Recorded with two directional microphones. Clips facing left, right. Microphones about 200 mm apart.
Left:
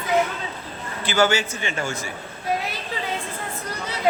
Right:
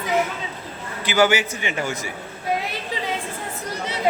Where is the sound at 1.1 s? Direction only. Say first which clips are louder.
Right 2 dB; 15° right (ahead or behind).